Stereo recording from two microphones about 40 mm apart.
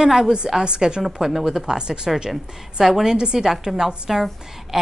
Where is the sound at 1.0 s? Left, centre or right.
Centre.